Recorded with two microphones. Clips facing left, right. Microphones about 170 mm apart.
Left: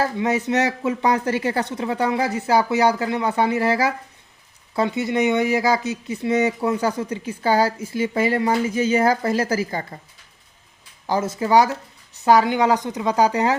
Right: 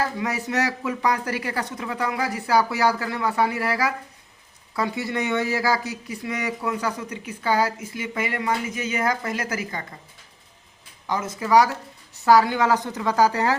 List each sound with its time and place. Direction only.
0.0 s speech: 25° left (ahead or behind)
11.0 s a woman's voice: 30° left (ahead or behind)